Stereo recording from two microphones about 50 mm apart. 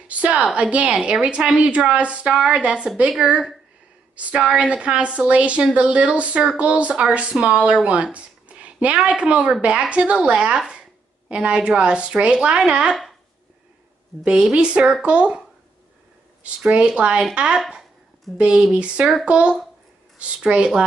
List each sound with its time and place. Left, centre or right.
0.1 s speech: right
0.9 s a woman's voice: centre
14.2 s speech: centre
16.4 s speech: right
16.8 s speech: centre